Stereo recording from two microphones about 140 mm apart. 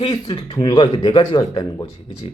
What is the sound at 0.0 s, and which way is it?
Speech, 30° left (ahead or behind).